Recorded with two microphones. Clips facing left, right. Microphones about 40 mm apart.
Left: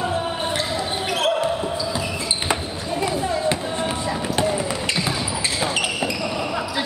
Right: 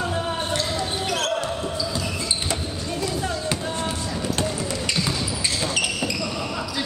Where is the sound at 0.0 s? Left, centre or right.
Centre.